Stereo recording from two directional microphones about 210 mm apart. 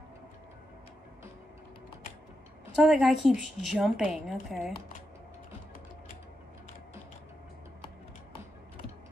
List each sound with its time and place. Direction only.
2.7 s a woman's voice: centre (ahead or behind)